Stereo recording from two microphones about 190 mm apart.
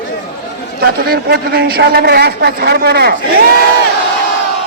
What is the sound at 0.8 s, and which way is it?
A woman's voice, 55° right (ahead or behind).